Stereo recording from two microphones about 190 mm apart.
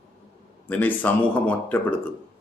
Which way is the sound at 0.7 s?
10° left (ahead or behind).